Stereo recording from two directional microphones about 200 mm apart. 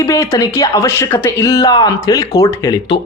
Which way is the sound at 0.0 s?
15° left (ahead or behind).